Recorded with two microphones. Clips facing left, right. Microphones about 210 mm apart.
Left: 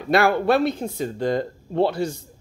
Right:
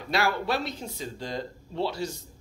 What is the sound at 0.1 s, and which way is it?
Speech, 55° left (ahead or behind).